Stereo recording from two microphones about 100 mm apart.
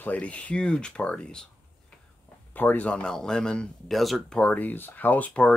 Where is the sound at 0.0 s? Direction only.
15° left (ahead or behind).